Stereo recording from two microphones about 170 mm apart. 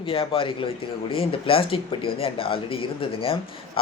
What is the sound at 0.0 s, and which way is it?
A man's voice, 30° left (ahead or behind).